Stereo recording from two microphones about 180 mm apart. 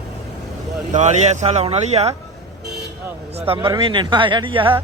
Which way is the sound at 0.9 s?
40° right (ahead or behind).